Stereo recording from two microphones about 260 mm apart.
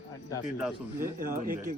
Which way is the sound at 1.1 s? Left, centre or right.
Right.